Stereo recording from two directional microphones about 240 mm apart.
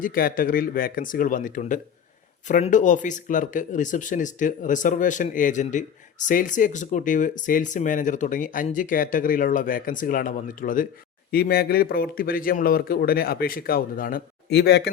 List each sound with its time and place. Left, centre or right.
0.0 s speech: left